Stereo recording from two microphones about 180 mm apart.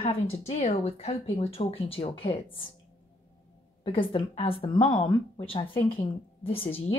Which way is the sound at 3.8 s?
25° left (ahead or behind).